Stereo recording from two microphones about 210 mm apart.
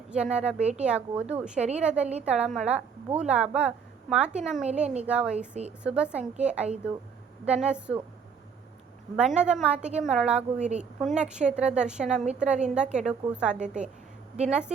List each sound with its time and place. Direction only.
0.1 s a woman's voice: 5° right (ahead or behind)
4.7 s a woman's voice: 30° right (ahead or behind)
5.0 s a woman's voice: 5° right (ahead or behind)
6.3 s a woman's voice: 35° right (ahead or behind)
7.4 s a woman's voice: 5° right (ahead or behind)
9.1 s a woman's voice: 5° right (ahead or behind)